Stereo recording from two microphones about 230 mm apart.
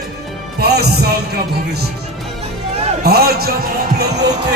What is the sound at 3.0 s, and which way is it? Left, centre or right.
Speech, right.